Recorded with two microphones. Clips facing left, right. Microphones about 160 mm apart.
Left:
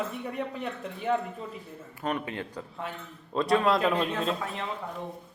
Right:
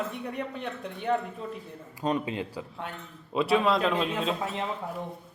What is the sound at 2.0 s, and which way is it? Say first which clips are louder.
Speech: right 3 dB; 20° right (ahead or behind).